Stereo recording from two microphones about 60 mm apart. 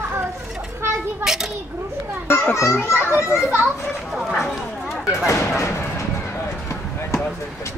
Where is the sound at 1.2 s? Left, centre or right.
Centre.